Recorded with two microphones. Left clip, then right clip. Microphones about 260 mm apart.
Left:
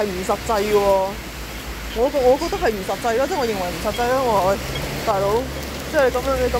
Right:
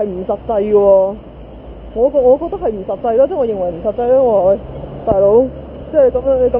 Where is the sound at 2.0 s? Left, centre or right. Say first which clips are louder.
Right 6 dB; centre.